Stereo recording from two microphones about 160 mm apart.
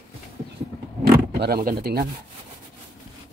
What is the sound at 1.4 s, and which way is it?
Speech, 70° right (ahead or behind).